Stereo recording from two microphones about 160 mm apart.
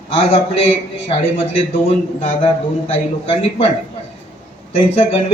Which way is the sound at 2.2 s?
40° left (ahead or behind).